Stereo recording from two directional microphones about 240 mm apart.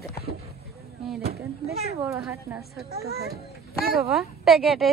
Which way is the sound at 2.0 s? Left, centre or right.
Centre.